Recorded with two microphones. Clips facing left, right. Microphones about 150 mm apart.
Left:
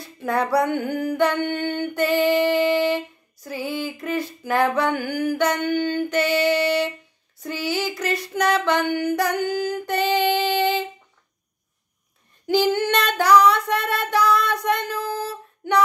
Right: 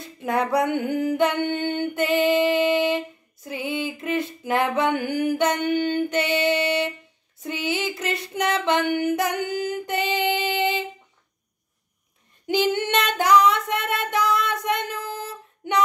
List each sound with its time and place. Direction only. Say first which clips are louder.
0.0 s female singing: left 1 dB; 20° right (ahead or behind)
12.4 s female singing: left 3 dB; 20° right (ahead or behind)